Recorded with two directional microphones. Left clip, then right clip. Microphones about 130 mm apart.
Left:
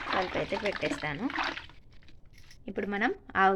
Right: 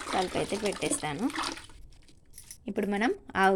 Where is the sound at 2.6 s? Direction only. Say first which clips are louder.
Right 1 dB; 35° right (ahead or behind).